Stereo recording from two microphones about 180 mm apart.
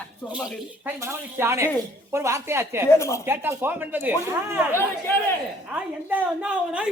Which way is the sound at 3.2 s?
15° right (ahead or behind).